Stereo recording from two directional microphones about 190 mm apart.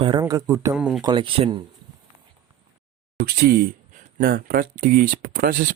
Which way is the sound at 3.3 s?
55° right (ahead or behind).